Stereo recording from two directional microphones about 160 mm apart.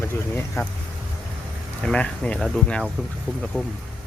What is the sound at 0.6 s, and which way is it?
Speech, 15° left (ahead or behind).